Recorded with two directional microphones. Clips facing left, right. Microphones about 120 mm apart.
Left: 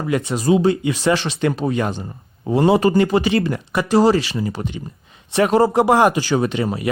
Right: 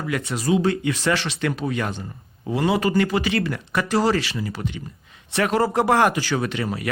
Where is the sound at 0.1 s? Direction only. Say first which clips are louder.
Left 5 dB; 25° left (ahead or behind).